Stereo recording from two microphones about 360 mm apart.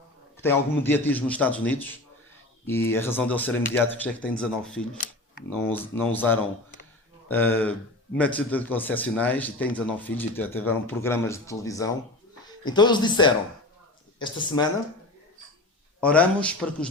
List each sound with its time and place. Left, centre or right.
0.4 s a man's voice: centre
16.0 s a man's voice: centre